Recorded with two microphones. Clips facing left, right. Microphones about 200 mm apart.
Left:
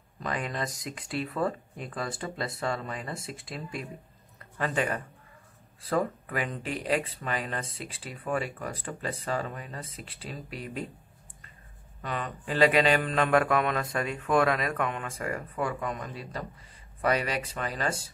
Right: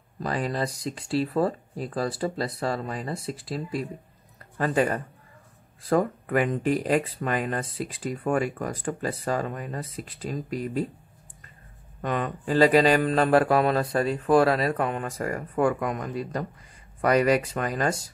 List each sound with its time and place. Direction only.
0.2 s speech: 35° right (ahead or behind)
3.2 s speech: centre (ahead or behind)
4.6 s speech: 40° right (ahead or behind)
7.6 s speech: centre (ahead or behind)
7.9 s speech: 50° right (ahead or behind)
12.0 s speech: 45° right (ahead or behind)